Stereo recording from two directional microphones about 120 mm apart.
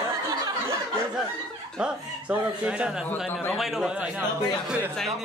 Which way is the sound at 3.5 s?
Centre (ahead or behind).